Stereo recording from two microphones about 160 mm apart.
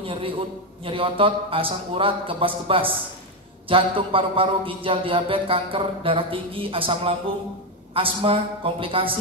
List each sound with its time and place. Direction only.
0.0 s a man's voice: 35° right (ahead or behind)